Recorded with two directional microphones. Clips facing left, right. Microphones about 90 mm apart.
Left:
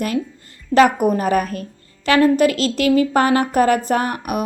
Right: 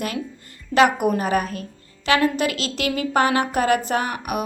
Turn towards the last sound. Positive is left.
turn(degrees=40)  # may be behind; listen again after turning